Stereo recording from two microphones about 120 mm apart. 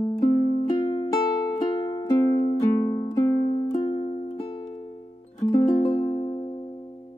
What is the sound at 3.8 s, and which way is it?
Music, 45° left (ahead or behind).